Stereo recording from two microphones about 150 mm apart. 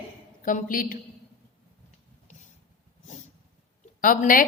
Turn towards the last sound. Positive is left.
turn(degrees=65)  # may be behind; listen again after turning